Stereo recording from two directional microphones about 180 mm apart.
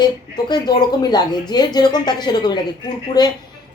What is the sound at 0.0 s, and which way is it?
A woman's voice, 25° left (ahead or behind).